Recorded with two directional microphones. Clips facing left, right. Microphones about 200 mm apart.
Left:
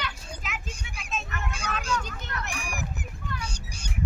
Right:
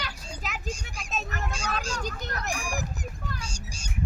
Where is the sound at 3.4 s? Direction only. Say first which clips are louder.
Left 1 dB; 60° left (ahead or behind).